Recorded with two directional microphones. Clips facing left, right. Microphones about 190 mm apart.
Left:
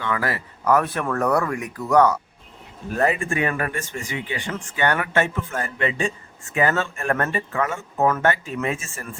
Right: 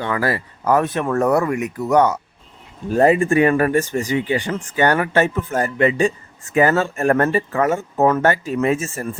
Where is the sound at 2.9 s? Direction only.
30° right (ahead or behind).